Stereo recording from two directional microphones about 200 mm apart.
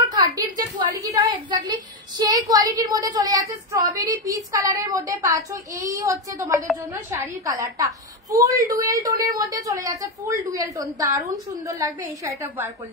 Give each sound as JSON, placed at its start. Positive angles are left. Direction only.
{"t": 0.1, "sound": "a woman's voice", "side_deg": -20}